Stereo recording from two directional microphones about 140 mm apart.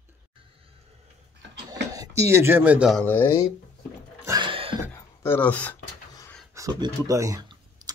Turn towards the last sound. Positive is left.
turn(degrees=-25)  # may be behind; listen again after turning